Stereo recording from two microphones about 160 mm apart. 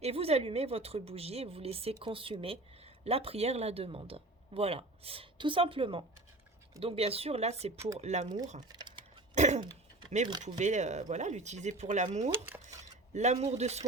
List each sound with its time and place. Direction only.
0.0 s a woman's voice: 40° right (ahead or behind)
8.7 s typing: 30° right (ahead or behind)
9.3 s cough: 45° right (ahead or behind)
10.4 s speech: 50° right (ahead or behind)
12.6 s a sound: 45° right (ahead or behind)